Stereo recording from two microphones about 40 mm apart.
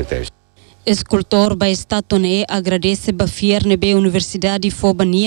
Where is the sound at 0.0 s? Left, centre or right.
Centre.